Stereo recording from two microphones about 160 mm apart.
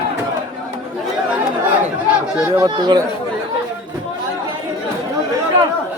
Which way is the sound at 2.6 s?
25° right (ahead or behind).